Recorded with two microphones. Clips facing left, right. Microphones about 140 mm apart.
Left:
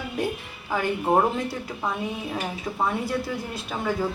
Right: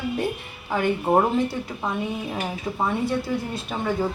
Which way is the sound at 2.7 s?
15° right (ahead or behind).